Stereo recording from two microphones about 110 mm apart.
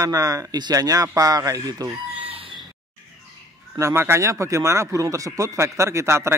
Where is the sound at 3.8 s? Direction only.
20° right (ahead or behind).